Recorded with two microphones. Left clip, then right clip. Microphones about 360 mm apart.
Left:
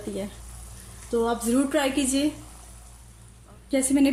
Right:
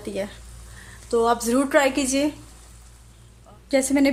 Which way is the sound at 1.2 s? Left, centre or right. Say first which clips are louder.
Right 4 dB; centre.